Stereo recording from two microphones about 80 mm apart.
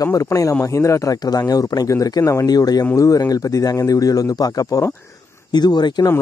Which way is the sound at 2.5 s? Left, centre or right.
Left.